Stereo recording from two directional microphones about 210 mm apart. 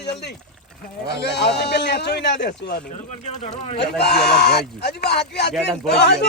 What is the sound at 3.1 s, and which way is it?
Speech, 30° left (ahead or behind).